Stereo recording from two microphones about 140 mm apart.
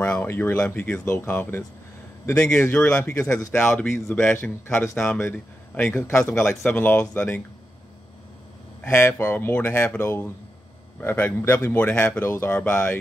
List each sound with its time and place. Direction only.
0.0 s speech: 10° left (ahead or behind)
8.8 s speech: 20° left (ahead or behind)